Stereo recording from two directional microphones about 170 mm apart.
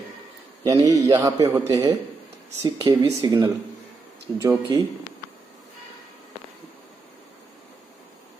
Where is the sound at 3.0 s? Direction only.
20° right (ahead or behind).